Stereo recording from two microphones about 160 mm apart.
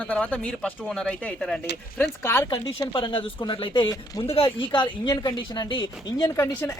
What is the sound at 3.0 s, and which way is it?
Speech, 35° left (ahead or behind).